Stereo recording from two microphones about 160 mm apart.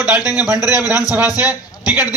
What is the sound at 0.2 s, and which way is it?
Speech, 25° left (ahead or behind).